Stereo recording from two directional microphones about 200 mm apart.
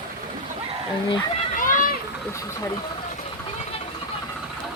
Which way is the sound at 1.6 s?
40° left (ahead or behind).